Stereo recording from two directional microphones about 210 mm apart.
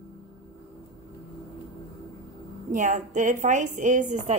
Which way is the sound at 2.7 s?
35° right (ahead or behind).